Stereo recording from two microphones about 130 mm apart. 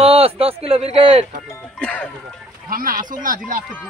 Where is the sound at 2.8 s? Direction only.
90° right.